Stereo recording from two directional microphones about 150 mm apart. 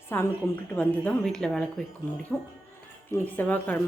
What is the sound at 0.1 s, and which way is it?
A woman's voice, 15° left (ahead or behind).